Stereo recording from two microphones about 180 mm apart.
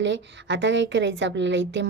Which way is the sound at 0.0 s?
85° right.